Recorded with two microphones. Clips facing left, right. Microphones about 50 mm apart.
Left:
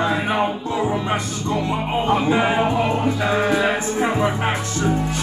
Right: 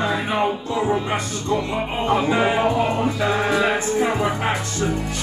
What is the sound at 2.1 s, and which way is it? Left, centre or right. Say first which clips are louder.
Music: even; centre.